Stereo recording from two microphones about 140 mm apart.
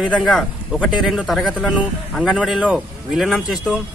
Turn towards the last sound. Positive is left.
turn(degrees=0)  # may be behind; listen again after turning